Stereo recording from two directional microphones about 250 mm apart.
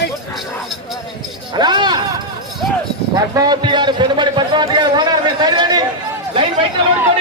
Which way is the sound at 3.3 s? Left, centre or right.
Centre.